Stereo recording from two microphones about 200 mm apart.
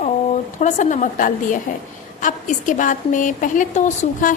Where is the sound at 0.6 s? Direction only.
40° left (ahead or behind).